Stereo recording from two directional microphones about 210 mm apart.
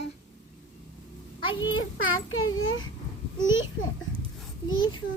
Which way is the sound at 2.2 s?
70° left (ahead or behind).